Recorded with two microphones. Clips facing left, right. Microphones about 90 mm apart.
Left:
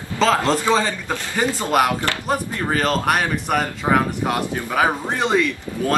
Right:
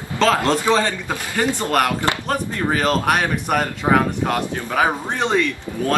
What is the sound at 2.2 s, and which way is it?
Speech, 5° right (ahead or behind).